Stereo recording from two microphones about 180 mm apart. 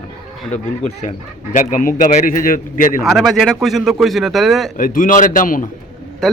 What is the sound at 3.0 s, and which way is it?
Speech, centre (ahead or behind).